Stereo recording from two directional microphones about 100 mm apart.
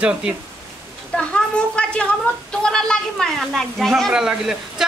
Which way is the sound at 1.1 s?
10° left (ahead or behind).